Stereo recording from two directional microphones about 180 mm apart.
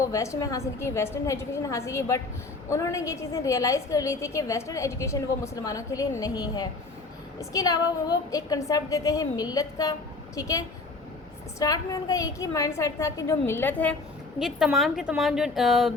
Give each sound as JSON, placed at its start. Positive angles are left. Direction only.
{"t": 0.0, "sound": "a woman's voice", "side_deg": 15}
{"t": 11.6, "sound": "a woman's voice", "side_deg": 20}
{"t": 14.3, "sound": "a woman's voice", "side_deg": 0}